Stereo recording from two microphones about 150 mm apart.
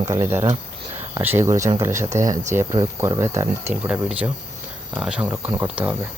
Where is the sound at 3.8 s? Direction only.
10° right (ahead or behind).